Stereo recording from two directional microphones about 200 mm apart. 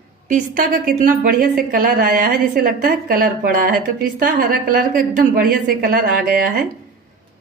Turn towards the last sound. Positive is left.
turn(degrees=-45)  # may be behind; listen again after turning